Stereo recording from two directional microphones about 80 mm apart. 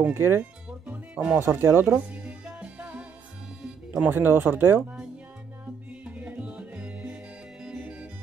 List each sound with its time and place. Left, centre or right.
0.1 s speech: right
0.4 s music: centre
1.4 s speech: right
2.2 s music: centre
3.9 s speech: centre
6.0 s music: centre
7.6 s organ: centre